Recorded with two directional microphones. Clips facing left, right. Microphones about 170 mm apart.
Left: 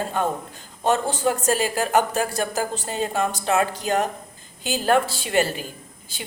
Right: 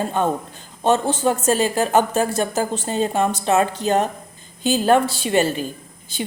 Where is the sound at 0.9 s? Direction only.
25° right (ahead or behind).